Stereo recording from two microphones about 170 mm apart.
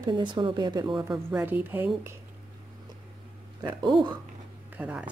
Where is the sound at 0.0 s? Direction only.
25° right (ahead or behind).